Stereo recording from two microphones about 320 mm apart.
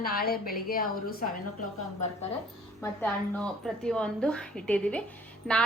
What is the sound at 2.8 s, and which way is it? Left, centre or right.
A woman's voice, centre.